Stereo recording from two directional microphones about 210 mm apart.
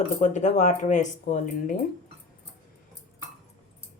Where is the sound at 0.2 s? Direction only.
35° left (ahead or behind).